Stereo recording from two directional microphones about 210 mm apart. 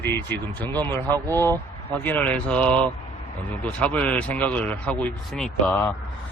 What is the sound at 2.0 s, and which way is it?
Mantra, 10° left (ahead or behind).